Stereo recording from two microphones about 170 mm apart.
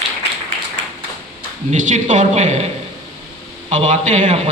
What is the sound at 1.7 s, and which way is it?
Speech, 45° right (ahead or behind).